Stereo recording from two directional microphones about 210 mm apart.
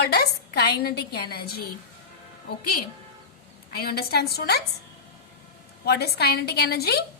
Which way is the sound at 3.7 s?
45° left (ahead or behind).